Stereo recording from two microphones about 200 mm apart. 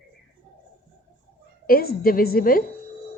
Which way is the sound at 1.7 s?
45° left (ahead or behind).